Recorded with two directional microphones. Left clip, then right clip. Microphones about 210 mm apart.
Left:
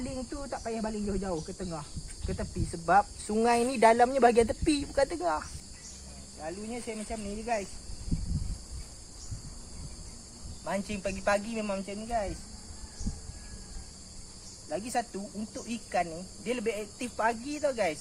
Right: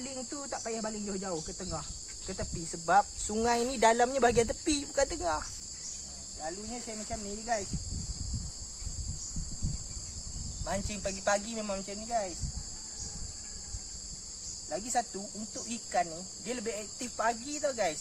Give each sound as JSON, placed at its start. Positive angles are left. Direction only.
{"t": 0.3, "sound": "cricket", "side_deg": -5}
{"t": 2.2, "sound": "speech", "side_deg": 5}
{"t": 6.4, "sound": "cricket", "side_deg": 25}
{"t": 10.7, "sound": "speech", "side_deg": 10}
{"t": 14.7, "sound": "speech", "side_deg": 10}